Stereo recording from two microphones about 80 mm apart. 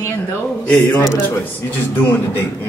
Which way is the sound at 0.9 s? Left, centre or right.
Left.